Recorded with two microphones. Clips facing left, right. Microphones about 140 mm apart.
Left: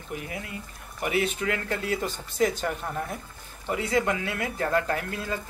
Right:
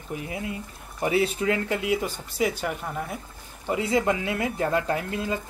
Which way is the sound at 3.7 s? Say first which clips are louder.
Right 2 dB; 25° right (ahead or behind).